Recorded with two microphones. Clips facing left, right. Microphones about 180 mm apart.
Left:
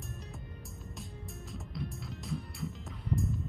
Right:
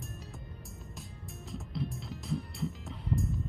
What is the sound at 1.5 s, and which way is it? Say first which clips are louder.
Music: right 4 dB; centre (ahead or behind).